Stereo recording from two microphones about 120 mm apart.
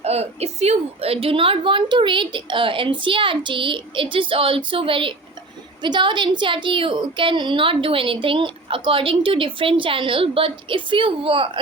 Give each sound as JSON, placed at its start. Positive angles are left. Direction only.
{"t": 0.0, "sound": "a woman's voice", "side_deg": -60}